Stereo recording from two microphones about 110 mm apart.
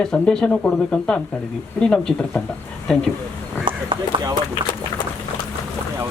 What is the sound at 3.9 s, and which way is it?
Run, 55° right (ahead or behind).